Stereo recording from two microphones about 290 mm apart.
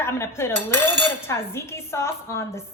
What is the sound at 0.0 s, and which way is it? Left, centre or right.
Dishes, centre.